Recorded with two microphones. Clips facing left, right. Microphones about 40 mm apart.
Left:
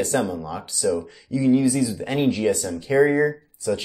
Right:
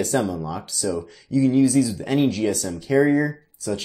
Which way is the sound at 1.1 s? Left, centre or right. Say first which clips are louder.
Right 3 dB; centre.